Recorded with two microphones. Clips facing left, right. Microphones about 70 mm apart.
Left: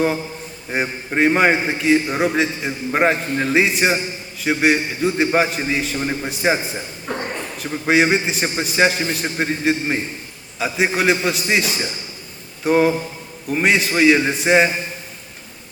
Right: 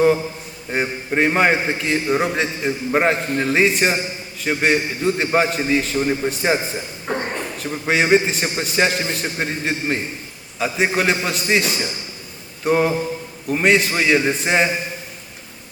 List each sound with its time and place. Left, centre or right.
0.7 s a man's voice: centre
7.1 s a sound: right
7.6 s a man's voice: centre